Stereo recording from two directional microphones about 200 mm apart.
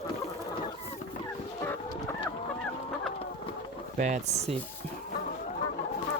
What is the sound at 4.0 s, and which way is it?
Speech, 35° right (ahead or behind).